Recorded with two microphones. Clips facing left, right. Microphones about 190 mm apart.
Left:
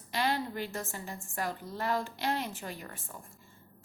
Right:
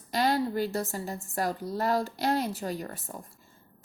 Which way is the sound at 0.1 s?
40° right (ahead or behind).